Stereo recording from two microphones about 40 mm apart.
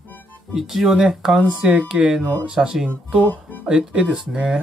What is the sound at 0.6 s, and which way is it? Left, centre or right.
Speech, centre.